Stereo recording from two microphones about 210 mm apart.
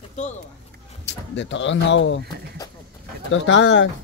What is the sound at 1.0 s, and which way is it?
Speech, 60° left (ahead or behind).